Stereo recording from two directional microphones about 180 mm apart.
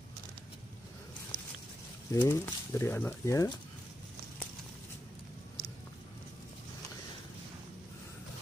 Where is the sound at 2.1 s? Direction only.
15° left (ahead or behind).